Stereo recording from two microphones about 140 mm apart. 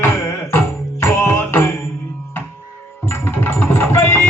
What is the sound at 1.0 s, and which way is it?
Music, 15° left (ahead or behind).